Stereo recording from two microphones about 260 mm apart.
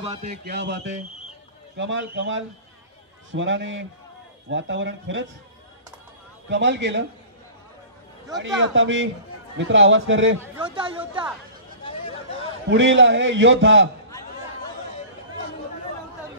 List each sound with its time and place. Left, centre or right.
0.0 s a man's voice: right
0.5 s a man's voice: right
6.5 s a man's voice: right
8.4 s a man's voice: right
10.6 s speech: centre
11.8 s a sound: left
12.6 s a man's voice: right